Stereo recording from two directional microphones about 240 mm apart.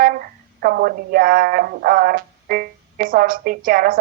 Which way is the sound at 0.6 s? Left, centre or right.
Right.